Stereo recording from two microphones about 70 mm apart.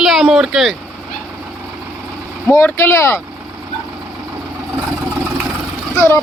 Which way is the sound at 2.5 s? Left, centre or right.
Left.